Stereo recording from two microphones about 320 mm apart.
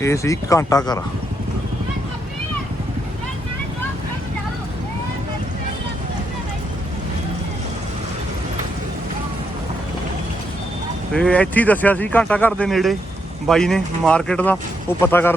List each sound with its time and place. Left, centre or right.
0.0 s speech: centre
11.1 s speech: centre